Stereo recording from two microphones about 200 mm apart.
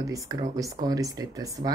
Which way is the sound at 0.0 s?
15° right (ahead or behind).